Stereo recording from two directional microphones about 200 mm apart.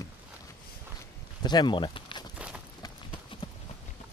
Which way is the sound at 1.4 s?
20° left (ahead or behind).